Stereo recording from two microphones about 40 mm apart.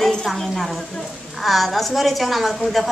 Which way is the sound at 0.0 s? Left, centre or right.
Centre.